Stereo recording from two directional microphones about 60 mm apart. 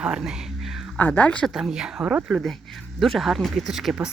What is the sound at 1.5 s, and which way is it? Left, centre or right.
Speech, centre.